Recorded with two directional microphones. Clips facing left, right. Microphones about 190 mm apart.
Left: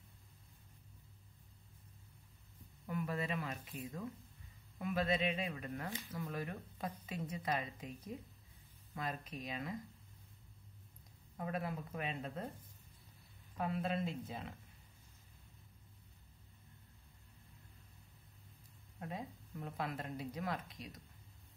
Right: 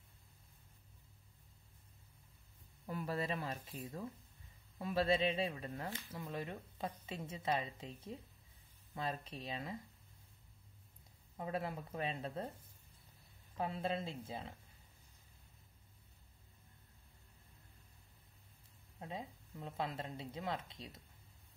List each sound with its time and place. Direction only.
2.9 s speech: 35° right (ahead or behind)
11.3 s speech: 25° right (ahead or behind)
13.6 s speech: 30° right (ahead or behind)
18.9 s speech: 20° right (ahead or behind)